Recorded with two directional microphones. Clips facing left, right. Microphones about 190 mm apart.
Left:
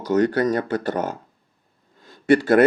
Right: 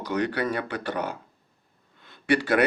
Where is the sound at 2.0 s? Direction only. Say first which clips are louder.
Left 7 dB; 45° left (ahead or behind).